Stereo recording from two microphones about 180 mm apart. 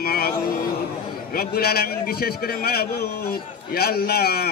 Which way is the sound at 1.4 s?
60° left (ahead or behind).